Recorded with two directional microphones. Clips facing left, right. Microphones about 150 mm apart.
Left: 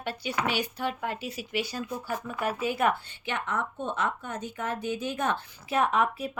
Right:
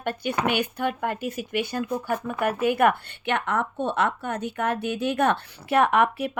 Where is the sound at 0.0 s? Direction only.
55° right (ahead or behind).